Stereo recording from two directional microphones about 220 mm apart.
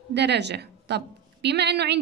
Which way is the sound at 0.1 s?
50° right (ahead or behind).